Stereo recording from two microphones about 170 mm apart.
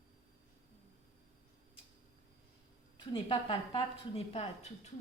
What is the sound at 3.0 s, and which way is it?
A woman's voice, 30° left (ahead or behind).